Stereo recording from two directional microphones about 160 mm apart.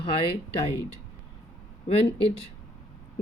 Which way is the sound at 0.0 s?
35° left (ahead or behind).